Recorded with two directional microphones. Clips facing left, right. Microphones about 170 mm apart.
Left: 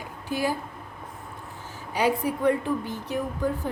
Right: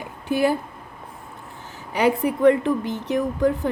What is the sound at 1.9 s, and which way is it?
Speech, 65° right (ahead or behind).